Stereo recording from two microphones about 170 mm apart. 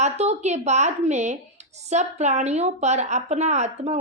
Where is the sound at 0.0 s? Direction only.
40° right (ahead or behind).